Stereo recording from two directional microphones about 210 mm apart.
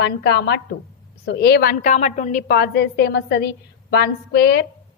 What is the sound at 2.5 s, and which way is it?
A woman's voice, 50° left (ahead or behind).